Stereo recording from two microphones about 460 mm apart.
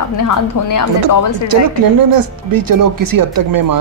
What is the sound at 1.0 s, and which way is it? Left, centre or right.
Speech, right.